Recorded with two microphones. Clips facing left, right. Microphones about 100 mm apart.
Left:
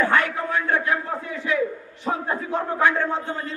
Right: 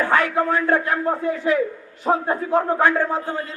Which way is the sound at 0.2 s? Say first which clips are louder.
Right 4 dB; 40° right (ahead or behind).